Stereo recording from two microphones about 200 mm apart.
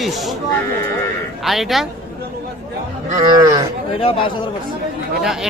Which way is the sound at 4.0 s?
25° left (ahead or behind).